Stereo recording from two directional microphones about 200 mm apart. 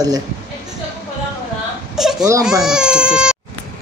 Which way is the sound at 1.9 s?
Centre (ahead or behind).